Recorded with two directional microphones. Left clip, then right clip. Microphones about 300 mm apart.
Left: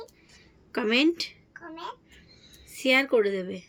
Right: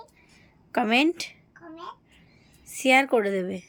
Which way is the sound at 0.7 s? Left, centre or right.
Centre.